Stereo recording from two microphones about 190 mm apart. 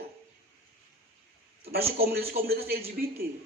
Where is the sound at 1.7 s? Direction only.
55° right (ahead or behind).